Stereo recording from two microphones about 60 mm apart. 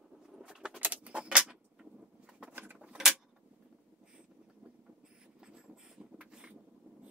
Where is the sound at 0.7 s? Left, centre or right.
Right.